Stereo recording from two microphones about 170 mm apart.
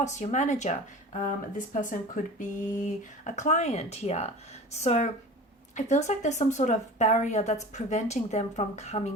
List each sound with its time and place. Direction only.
0.0 s speech: 45° left (ahead or behind)